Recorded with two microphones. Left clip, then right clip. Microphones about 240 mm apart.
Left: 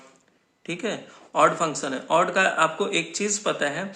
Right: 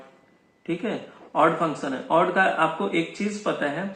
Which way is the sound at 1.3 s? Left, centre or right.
Left.